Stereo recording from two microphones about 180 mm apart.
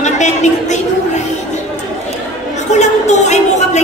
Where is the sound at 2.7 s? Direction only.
40° left (ahead or behind).